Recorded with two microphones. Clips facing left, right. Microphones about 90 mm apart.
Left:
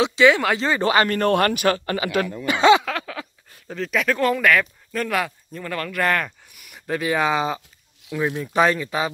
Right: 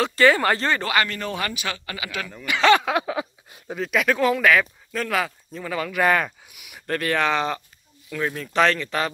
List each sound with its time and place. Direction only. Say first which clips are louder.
0.0 s speech: left 2 dB; centre (ahead or behind)
1.0 s a man's voice: left 9 dB; 50° left (ahead or behind)
2.8 s speech: right 5 dB; 15° right (ahead or behind); by 9.1 s 10° left (ahead or behind)